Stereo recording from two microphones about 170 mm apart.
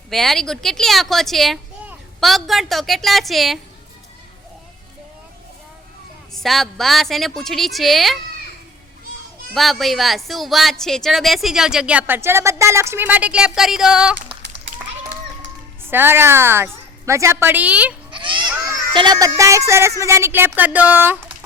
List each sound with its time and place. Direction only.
0.1 s speech: centre (ahead or behind)
6.3 s speech: centre (ahead or behind)
9.6 s speech: centre (ahead or behind)
15.8 s a woman's voice: 15° right (ahead or behind)
18.1 s a sound: 30° right (ahead or behind)
18.9 s a woman's voice: 25° right (ahead or behind)